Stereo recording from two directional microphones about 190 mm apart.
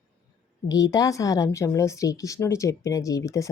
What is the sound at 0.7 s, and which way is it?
Speech, 20° left (ahead or behind).